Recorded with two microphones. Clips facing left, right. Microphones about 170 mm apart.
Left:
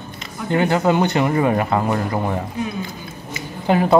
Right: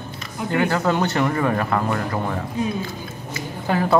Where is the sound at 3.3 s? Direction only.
20° left (ahead or behind).